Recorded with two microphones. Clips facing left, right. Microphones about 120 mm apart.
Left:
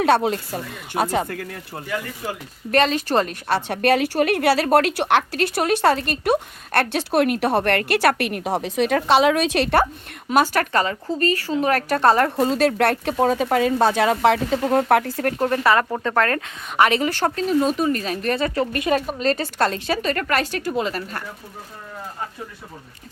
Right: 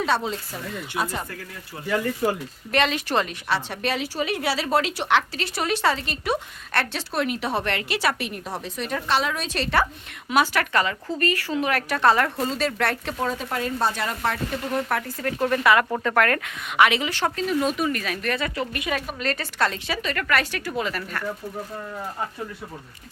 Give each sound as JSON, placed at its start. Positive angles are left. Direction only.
{"t": 0.0, "sound": "a woman's voice", "side_deg": 60}
{"t": 2.7, "sound": "a woman's voice", "side_deg": 40}
{"t": 10.2, "sound": "speech", "side_deg": 40}
{"t": 12.4, "sound": "speech", "side_deg": 60}
{"t": 14.7, "sound": "speech", "side_deg": 75}
{"t": 15.4, "sound": "speech", "side_deg": 35}